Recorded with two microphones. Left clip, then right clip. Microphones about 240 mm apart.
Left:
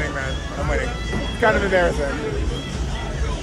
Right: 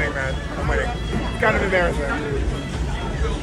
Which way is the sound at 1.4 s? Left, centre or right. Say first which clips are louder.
Left 2 dB; left.